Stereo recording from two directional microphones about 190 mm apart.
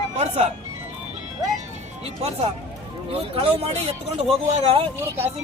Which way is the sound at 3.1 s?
30° right (ahead or behind).